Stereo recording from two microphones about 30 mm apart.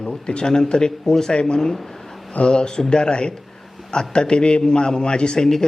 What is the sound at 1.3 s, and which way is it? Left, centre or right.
A man's voice, left.